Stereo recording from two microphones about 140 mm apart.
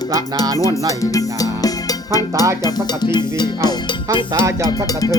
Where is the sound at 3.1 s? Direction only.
30° left (ahead or behind).